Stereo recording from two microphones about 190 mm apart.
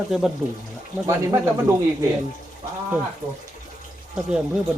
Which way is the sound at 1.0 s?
15° right (ahead or behind).